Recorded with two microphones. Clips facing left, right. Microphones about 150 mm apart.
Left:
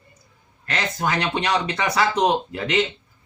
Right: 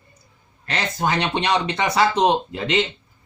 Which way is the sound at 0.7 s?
25° right (ahead or behind).